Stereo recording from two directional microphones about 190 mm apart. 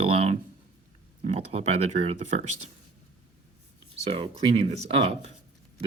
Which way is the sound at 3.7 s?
30° right (ahead or behind).